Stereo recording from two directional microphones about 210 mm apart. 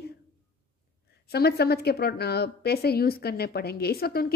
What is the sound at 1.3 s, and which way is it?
A woman's voice, 50° left (ahead or behind).